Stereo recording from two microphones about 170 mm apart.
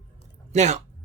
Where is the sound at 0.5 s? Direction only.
40° right (ahead or behind).